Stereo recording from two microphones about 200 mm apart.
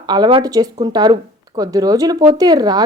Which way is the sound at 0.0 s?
20° right (ahead or behind).